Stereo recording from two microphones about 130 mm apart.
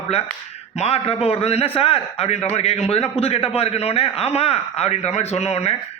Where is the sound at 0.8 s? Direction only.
50° left (ahead or behind).